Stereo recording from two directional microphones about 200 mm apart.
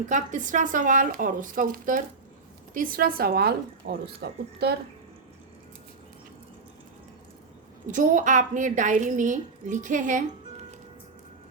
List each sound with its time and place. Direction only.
0.1 s a woman's voice: 40° right (ahead or behind)
7.9 s a woman's voice: 40° right (ahead or behind)